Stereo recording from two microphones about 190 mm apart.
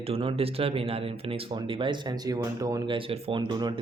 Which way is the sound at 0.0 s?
30° right (ahead or behind).